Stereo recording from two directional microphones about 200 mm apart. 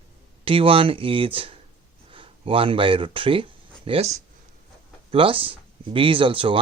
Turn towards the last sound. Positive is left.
turn(degrees=-25)  # may be behind; listen again after turning